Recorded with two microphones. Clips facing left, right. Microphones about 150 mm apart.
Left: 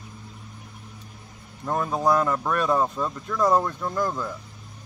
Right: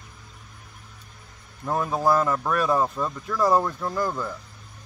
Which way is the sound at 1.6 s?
5° right (ahead or behind).